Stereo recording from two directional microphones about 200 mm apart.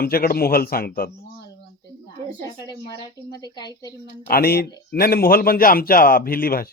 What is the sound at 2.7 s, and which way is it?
Speech, 20° left (ahead or behind).